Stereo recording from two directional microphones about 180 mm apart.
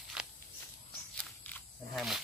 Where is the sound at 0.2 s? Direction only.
Centre (ahead or behind).